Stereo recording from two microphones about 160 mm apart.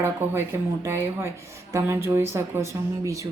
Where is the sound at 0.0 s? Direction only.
15° right (ahead or behind).